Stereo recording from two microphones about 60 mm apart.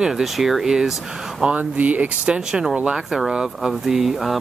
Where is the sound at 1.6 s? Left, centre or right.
Right.